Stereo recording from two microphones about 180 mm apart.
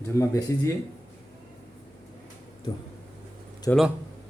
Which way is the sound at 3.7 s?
15° left (ahead or behind).